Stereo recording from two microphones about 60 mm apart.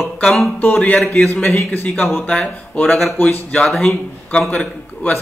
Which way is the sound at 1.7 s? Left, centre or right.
Left.